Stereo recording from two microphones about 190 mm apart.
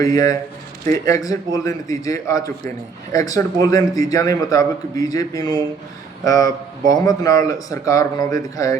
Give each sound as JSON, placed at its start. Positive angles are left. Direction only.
{"t": 0.0, "sound": "a man's voice", "side_deg": 20}